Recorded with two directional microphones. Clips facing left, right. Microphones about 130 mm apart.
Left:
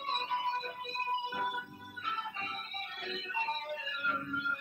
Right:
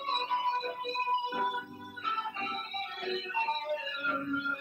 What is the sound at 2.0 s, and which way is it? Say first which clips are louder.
Music: right 4 dB; 25° right (ahead or behind).